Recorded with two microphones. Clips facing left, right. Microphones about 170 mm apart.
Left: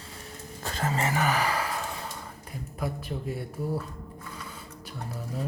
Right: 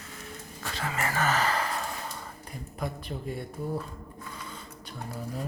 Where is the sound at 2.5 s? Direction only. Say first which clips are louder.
Left 2 dB; 5° left (ahead or behind).